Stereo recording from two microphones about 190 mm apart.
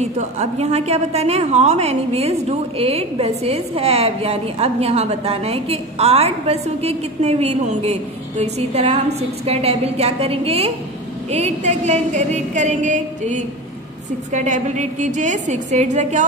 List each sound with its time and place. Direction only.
0.0 s a woman's voice: 35° right (ahead or behind)